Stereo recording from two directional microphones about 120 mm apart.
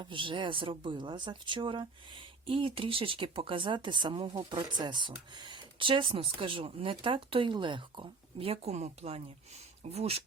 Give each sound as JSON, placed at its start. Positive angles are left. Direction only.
{"t": 0.0, "sound": "speech", "side_deg": -45}